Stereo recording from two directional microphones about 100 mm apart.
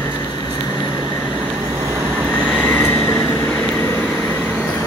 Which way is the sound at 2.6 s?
20° left (ahead or behind).